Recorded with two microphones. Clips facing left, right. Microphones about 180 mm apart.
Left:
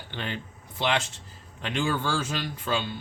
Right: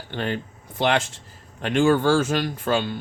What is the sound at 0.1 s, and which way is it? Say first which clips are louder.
Speech: right 8 dB; 50° right (ahead or behind).